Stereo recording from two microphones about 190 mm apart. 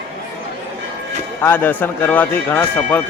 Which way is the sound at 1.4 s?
10° left (ahead or behind).